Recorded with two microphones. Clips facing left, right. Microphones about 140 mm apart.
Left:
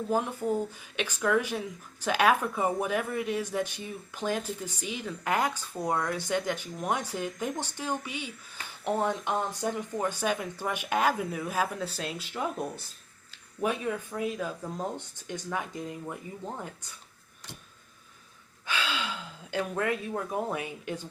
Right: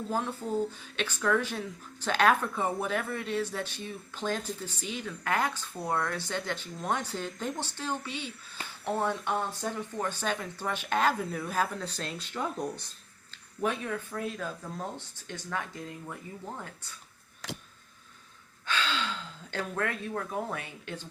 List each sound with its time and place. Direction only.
0.1 s speech: 15° left (ahead or behind)
17.4 s a sound: 90° right
18.6 s speech: 10° left (ahead or behind)